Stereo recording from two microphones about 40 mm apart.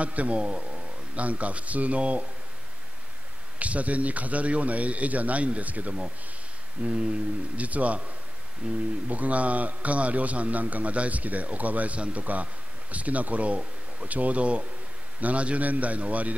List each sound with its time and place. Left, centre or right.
0.0 s speech: right
3.5 s a man's voice: right